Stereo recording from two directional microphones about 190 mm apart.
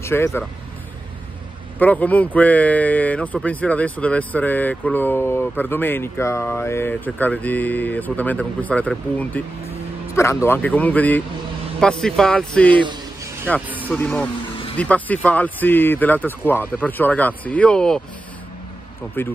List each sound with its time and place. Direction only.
0.0 s speech: 15° left (ahead or behind)
1.8 s speech: 10° left (ahead or behind)
10.4 s a man's voice: 10° left (ahead or behind)
12.8 s a sound: 25° right (ahead or behind)
13.8 s speech: 10° left (ahead or behind)
19.2 s speech: 10° left (ahead or behind)